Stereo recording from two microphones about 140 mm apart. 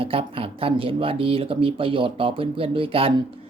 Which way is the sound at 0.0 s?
40° right (ahead or behind).